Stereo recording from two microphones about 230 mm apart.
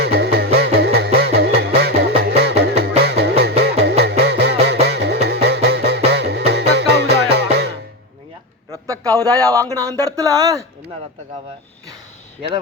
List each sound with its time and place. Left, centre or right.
0.0 s music: right
8.7 s a sound: centre
9.7 s speech: centre